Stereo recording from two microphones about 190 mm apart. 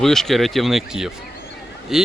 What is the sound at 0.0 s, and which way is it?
A man's voice, centre (ahead or behind).